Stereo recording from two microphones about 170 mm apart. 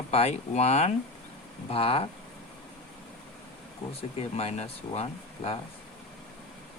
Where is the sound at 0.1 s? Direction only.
40° left (ahead or behind).